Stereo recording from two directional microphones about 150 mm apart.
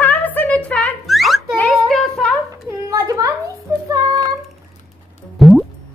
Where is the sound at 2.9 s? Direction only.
25° right (ahead or behind).